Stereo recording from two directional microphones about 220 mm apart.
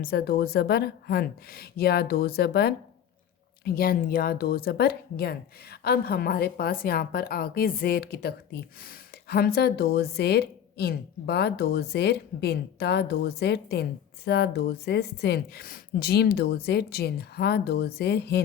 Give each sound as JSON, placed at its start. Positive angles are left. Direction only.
{"t": 0.0, "sound": "a woman's voice", "side_deg": 45}